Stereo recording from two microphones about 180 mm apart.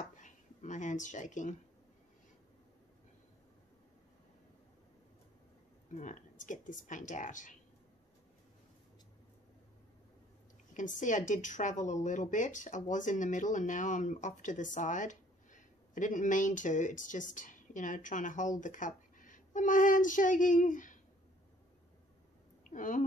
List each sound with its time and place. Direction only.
0.1 s speech: 45° left (ahead or behind)
5.9 s speech: 45° left (ahead or behind)
11.0 s speech: 45° left (ahead or behind)
22.6 s a sound: 45° left (ahead or behind)